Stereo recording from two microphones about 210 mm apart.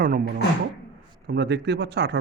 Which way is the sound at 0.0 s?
40° right (ahead or behind).